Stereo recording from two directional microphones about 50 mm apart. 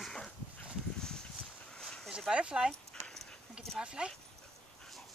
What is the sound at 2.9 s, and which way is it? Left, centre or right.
Dog, centre.